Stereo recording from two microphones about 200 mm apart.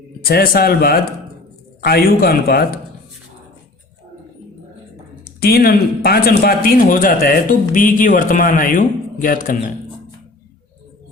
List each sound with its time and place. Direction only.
0.3 s a man's voice: 50° left (ahead or behind)
5.2 s a man's voice: 50° left (ahead or behind)